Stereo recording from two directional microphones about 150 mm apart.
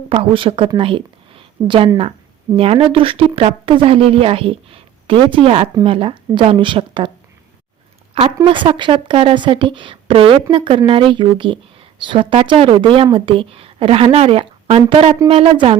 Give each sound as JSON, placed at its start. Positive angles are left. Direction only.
{"t": 0.1, "sound": "a woman's voice", "side_deg": -35}
{"t": 8.4, "sound": "speech", "side_deg": -35}